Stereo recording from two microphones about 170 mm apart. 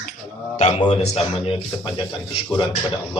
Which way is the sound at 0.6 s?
30° left (ahead or behind).